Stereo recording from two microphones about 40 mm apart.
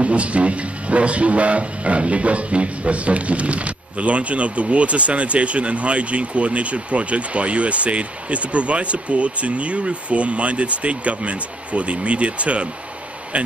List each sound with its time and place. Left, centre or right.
0.0 s speech: right